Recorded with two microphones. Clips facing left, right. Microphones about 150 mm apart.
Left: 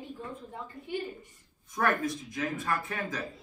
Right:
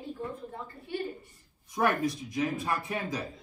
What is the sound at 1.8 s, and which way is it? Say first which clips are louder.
Speech: right 1 dB; 20° right (ahead or behind).